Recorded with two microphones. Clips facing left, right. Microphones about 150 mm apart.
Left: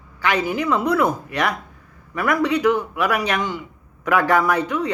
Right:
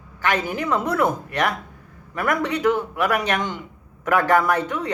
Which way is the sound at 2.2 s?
45° right (ahead or behind).